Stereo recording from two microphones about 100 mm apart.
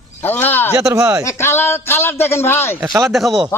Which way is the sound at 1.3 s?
25° left (ahead or behind).